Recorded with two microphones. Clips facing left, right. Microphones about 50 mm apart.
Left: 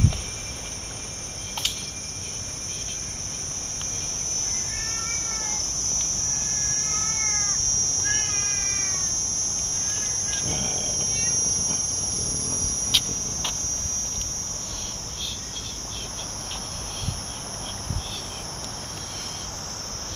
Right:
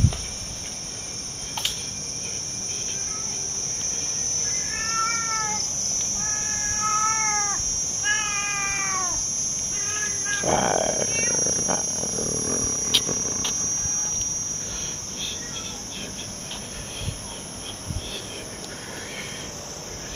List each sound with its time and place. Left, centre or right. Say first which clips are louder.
4.7 s cat: right 12 dB; right
10.4 s purr: right 13 dB; right
13.0 s a sound: right 5 dB; right